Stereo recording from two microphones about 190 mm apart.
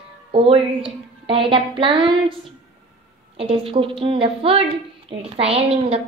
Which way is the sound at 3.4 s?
30° right (ahead or behind).